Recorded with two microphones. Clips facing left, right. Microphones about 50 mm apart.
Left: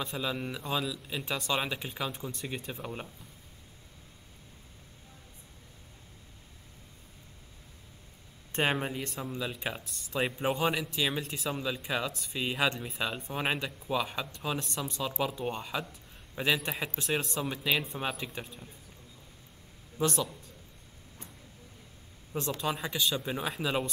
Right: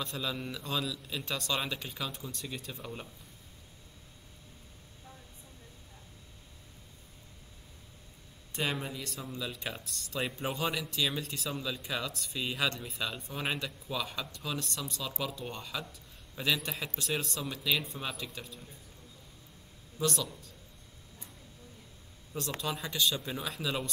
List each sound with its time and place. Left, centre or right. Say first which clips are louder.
0.0 s speech: left 2 dB; centre
8.5 s speech: left 5 dB; left
9.1 s speech: left 3 dB; left
11.6 s speech: left 5 dB; left
15.9 s a sound: left 3 dB; left
16.8 s speech: left 3 dB; left
20.0 s speech: left 3 dB; left
22.3 s speech: left 4 dB; left
22.8 s speech: left 1 dB; centre